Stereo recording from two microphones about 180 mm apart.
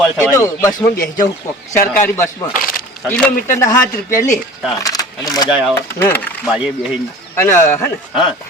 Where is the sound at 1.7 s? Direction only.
50° left (ahead or behind).